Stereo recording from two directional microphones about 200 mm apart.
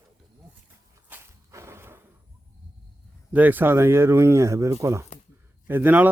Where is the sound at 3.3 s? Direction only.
10° right (ahead or behind).